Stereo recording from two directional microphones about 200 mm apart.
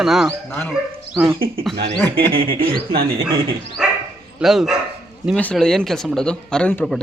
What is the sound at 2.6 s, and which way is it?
Speech, 45° right (ahead or behind).